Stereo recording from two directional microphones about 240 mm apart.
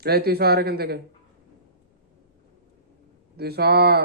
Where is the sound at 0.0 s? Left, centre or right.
Right.